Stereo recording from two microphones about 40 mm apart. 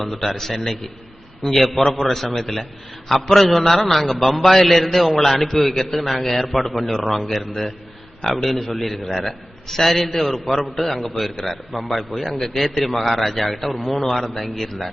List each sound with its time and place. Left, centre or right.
0.0 s a man's voice: centre